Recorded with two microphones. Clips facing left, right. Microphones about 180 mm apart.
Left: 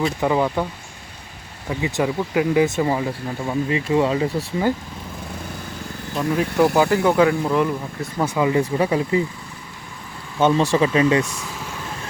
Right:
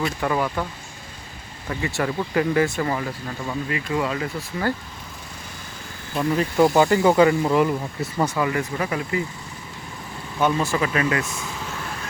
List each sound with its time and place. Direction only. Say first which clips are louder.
0.2 s speech: left 5 dB; 20° left (ahead or behind)
1.7 s speech: left 3 dB; 10° left (ahead or behind); by 4.4 s 25° left (ahead or behind)
6.1 s speech: even; centre (ahead or behind)
8.2 s speech: left 4 dB; 15° left (ahead or behind)
10.4 s speech: left 5 dB; 30° left (ahead or behind)